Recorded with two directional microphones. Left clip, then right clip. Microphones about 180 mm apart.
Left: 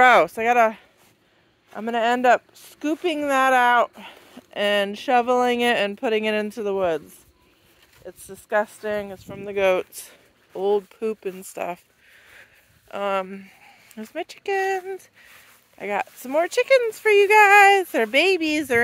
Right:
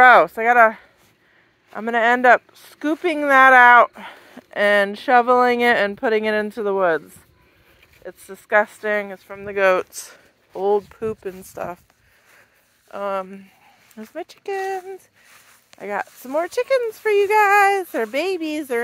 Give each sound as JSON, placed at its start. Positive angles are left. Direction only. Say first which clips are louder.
{"t": 0.0, "sound": "speech", "louder": "right 4 dB", "side_deg": 10}
{"t": 8.0, "sound": "speech", "louder": "right 3 dB", "side_deg": -15}
{"t": 9.3, "sound": "speech", "louder": "right 3 dB", "side_deg": 5}
{"t": 12.9, "sound": "a sound", "louder": "even", "side_deg": 10}
{"t": 14.1, "sound": "a woman's voice", "louder": "left 2 dB", "side_deg": 5}